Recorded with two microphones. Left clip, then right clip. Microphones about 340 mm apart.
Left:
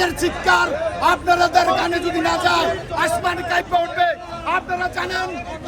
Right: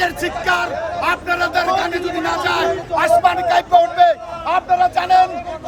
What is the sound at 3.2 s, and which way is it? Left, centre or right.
A man's voice, right.